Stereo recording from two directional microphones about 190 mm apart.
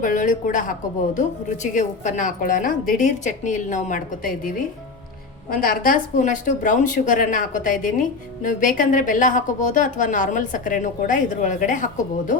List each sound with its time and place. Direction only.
0.0 s a woman's voice: 45° left (ahead or behind)
1.6 s a woman's voice: 40° left (ahead or behind)